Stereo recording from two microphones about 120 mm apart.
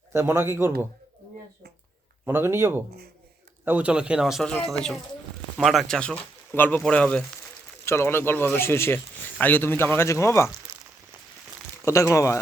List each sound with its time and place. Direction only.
0.1 s a man's voice: 20° right (ahead or behind)
2.2 s a man's voice: 20° right (ahead or behind); by 7.3 s 10° left (ahead or behind)
7.9 s speech: 20° left (ahead or behind)
11.9 s speech: 25° left (ahead or behind)